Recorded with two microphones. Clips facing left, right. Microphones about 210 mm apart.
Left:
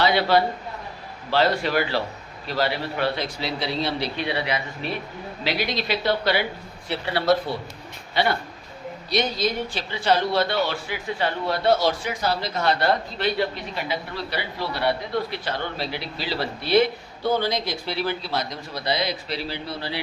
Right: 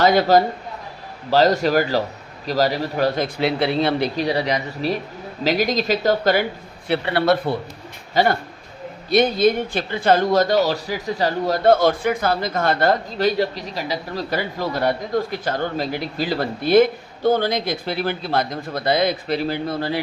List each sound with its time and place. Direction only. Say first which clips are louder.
0.0 s speech: right 5 dB; 45° right (ahead or behind)
3.3 s speech: right 8 dB; 55° right (ahead or behind)
4.2 s speech: right 5 dB; 40° right (ahead or behind)
6.8 s speech: right 4 dB; 60° right (ahead or behind)
8.1 s speech: right 5 dB; 45° right (ahead or behind)